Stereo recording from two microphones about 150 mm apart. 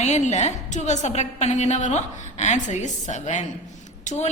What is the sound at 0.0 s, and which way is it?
A woman's voice, 50° left (ahead or behind).